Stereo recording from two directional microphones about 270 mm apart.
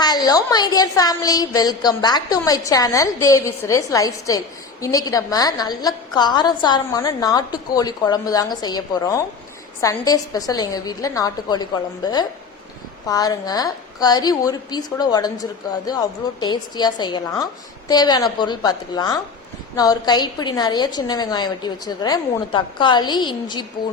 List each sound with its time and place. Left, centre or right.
0.0 s a woman's voice: centre